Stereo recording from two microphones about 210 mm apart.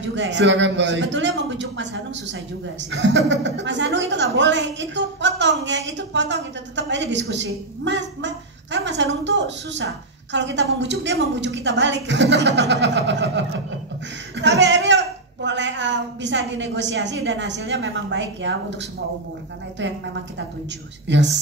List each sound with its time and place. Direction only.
0.0 s a woman's voice: 60° right (ahead or behind)
21.1 s a woman's voice: 55° right (ahead or behind)